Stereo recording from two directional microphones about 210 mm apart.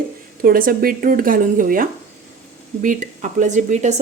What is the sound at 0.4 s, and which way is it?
A woman's voice, 45° right (ahead or behind).